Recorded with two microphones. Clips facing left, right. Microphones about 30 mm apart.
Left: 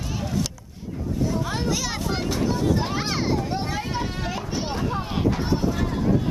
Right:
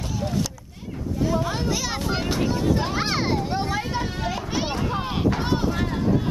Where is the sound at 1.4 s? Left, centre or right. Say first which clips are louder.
Even; centre.